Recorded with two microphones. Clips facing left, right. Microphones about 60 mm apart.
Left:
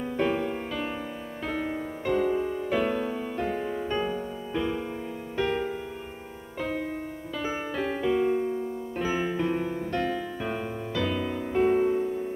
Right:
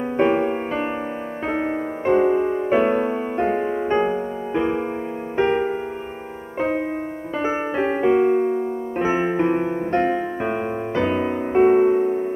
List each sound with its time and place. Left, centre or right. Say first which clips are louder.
0.2 s music: right 9 dB; right
7.3 s piano: right 8 dB; right